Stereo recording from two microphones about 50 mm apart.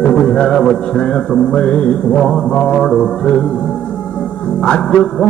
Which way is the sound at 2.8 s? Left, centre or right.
Centre.